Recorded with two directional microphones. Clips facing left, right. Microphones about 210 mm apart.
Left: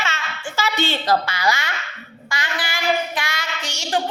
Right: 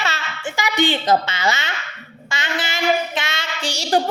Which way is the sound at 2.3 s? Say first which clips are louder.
Right 2 dB; 25° right (ahead or behind).